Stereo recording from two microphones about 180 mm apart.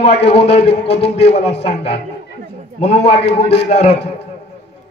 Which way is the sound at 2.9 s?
70° left (ahead or behind).